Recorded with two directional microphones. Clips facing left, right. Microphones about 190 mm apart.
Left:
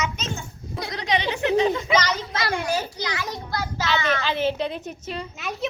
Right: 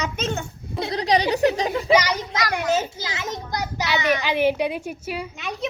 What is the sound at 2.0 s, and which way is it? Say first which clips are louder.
Speech: right 1 dB; 15° right (ahead or behind).